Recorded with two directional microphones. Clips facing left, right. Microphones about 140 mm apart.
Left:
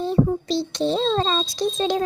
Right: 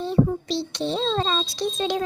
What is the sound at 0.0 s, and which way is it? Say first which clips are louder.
A child's voice: left 1 dB; 40° left (ahead or behind).